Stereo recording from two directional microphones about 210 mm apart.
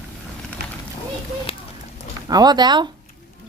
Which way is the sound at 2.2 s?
20° right (ahead or behind).